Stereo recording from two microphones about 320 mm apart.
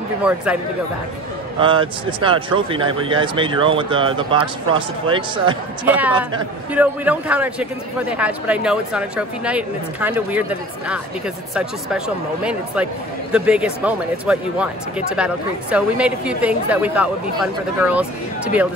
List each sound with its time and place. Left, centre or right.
1.6 s a woman's voice: centre
13.3 s a woman's voice: centre